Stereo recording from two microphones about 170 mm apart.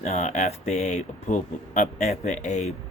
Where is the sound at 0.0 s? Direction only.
40° left (ahead or behind).